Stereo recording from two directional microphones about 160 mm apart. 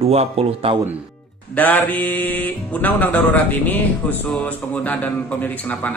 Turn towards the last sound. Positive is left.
turn(degrees=10)  # may be behind; listen again after turning